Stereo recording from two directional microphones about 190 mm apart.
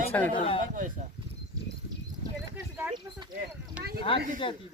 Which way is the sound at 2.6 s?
10° right (ahead or behind).